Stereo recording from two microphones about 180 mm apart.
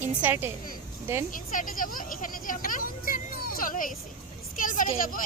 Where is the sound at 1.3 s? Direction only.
50° left (ahead or behind).